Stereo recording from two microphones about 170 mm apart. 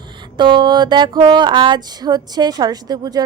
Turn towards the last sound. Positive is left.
turn(degrees=-25)  # may be behind; listen again after turning